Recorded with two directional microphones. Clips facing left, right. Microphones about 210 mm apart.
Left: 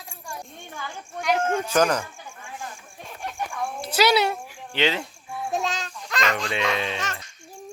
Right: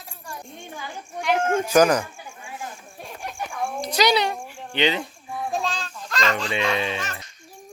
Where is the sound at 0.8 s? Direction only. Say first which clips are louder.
Even; 15° right (ahead or behind).